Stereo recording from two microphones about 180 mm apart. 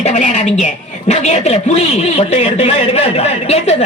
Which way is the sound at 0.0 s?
40° left (ahead or behind).